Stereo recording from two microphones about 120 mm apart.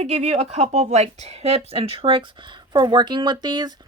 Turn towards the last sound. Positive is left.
turn(degrees=-35)  # may be behind; listen again after turning